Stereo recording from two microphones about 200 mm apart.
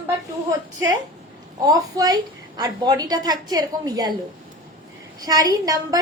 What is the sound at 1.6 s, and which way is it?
A woman's voice, 20° right (ahead or behind).